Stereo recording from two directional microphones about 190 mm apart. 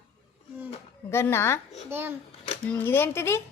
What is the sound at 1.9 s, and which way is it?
Speech, 10° right (ahead or behind).